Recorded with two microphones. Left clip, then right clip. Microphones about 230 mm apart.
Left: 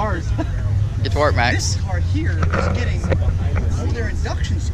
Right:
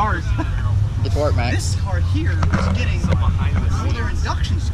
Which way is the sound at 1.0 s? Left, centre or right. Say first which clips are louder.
Left 5 dB; left.